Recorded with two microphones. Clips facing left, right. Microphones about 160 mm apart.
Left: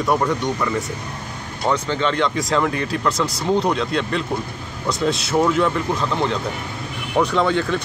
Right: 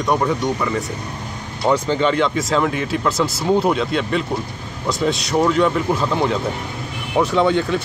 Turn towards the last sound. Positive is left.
turn(degrees=0)  # may be behind; listen again after turning